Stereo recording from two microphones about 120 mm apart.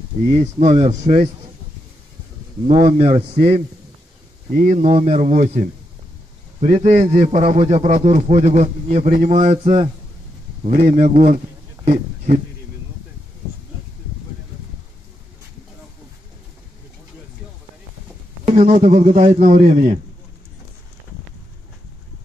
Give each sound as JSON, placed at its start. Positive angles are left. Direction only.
{"t": 0.3, "sound": "a man's voice", "side_deg": -75}
{"t": 2.7, "sound": "speech", "side_deg": -55}
{"t": 3.2, "sound": "a man's voice", "side_deg": -40}
{"t": 4.6, "sound": "a man's voice", "side_deg": -70}
{"t": 10.7, "sound": "a man's voice", "side_deg": -70}
{"t": 18.7, "sound": "a man's voice", "side_deg": -65}